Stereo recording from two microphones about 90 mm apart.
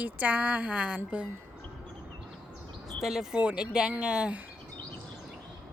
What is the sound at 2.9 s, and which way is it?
Speech, 5° right (ahead or behind).